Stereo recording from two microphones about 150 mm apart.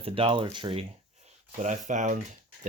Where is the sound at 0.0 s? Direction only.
35° right (ahead or behind).